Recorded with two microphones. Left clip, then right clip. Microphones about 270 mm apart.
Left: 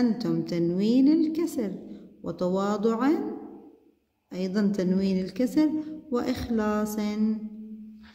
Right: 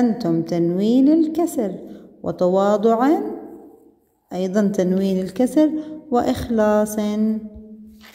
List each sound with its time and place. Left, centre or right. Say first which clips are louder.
0.0 s a woman's voice: right 7 dB; centre
4.3 s a woman's voice: right 8 dB; centre